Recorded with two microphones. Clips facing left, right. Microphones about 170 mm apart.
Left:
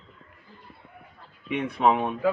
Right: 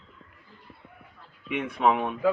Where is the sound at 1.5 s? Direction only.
30° left (ahead or behind).